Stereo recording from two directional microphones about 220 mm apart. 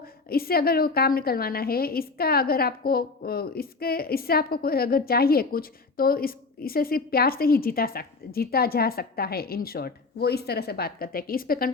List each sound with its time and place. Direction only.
0.0 s a woman's voice: 45° left (ahead or behind)